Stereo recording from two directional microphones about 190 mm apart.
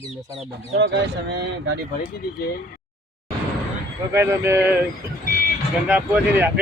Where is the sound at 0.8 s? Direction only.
65° right (ahead or behind).